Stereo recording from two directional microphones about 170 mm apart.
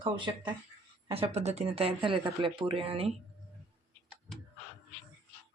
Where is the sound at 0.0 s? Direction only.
25° right (ahead or behind).